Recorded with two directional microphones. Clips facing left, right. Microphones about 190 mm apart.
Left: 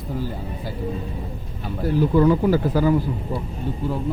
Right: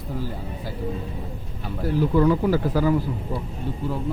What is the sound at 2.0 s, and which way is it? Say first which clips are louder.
Speech: left 2 dB; 20° left (ahead or behind).